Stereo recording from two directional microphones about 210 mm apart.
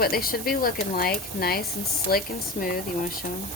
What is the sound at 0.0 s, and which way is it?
Speech, 45° left (ahead or behind).